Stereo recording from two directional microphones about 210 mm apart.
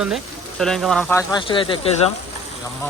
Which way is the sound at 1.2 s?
20° left (ahead or behind).